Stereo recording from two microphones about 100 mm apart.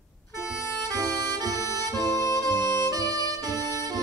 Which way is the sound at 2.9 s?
40° right (ahead or behind).